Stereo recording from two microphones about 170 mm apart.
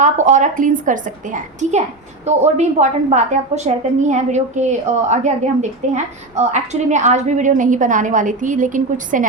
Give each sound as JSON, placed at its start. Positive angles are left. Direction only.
{"t": 0.0, "sound": "a woman's voice", "side_deg": -45}